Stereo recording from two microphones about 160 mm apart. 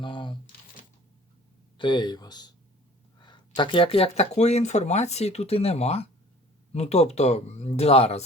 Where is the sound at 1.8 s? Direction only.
30° left (ahead or behind).